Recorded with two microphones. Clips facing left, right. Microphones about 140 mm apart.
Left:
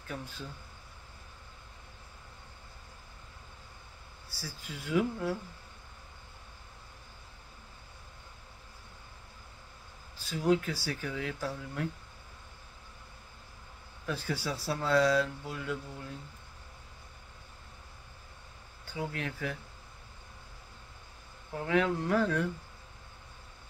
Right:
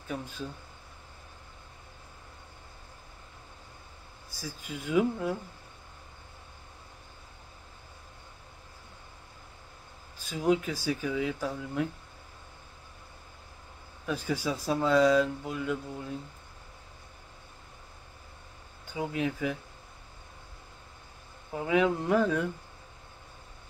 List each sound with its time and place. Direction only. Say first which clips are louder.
4.4 s speech: right 5 dB; 15° right (ahead or behind)
10.2 s speech: right 1 dB; 20° right (ahead or behind)
14.0 s speech: right 4 dB; 15° right (ahead or behind)
18.9 s speech: right 6 dB; 15° right (ahead or behind)
21.5 s speech: right 3 dB; 15° right (ahead or behind)